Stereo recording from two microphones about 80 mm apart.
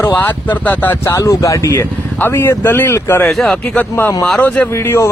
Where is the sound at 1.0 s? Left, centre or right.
Left.